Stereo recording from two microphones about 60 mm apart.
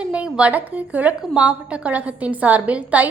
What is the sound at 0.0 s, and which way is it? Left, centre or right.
A woman's voice, centre.